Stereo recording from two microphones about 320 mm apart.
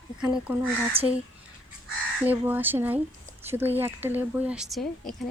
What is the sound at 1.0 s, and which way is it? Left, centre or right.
Speech, centre.